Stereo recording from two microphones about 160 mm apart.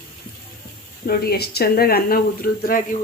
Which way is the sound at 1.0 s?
70° left (ahead or behind).